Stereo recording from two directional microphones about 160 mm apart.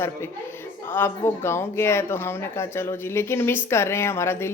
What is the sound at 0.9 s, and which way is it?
Speech, 15° left (ahead or behind).